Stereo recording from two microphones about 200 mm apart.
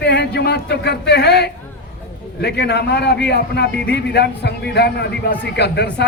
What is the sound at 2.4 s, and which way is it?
Speech, 55° left (ahead or behind).